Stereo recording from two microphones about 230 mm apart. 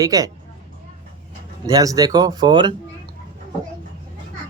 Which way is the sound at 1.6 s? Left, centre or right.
Centre.